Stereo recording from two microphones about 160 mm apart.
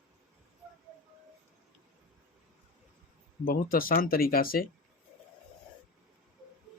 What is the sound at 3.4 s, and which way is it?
Speech, 65° left (ahead or behind).